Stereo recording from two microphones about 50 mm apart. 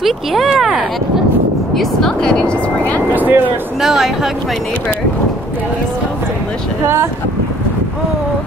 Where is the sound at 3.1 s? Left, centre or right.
Right.